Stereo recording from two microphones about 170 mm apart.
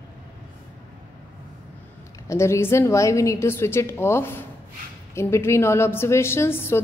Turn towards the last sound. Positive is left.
turn(degrees=15)  # may be behind; listen again after turning